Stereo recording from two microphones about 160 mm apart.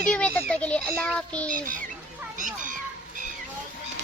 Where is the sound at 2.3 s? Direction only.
55° right (ahead or behind).